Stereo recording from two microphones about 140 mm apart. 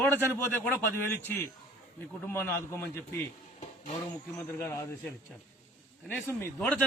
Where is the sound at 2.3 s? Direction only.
15° left (ahead or behind).